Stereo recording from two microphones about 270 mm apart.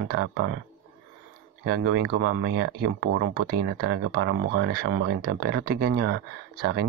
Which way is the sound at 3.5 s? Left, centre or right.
Right.